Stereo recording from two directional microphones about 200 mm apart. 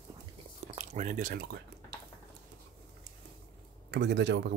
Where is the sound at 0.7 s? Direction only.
40° right (ahead or behind).